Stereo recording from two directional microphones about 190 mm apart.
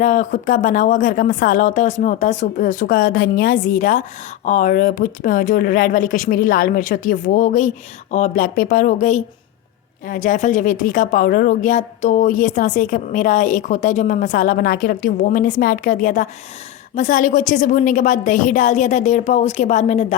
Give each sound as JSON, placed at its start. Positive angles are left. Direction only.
{"t": 0.0, "sound": "a woman's voice", "side_deg": 40}